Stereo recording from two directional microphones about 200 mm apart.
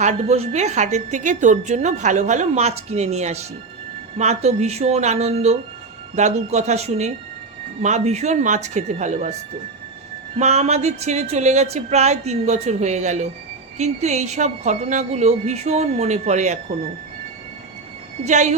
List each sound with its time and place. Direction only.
0.0 s a woman's voice: 35° right (ahead or behind)
10.3 s a woman's voice: 35° right (ahead or behind)
18.3 s a woman's voice: 35° right (ahead or behind)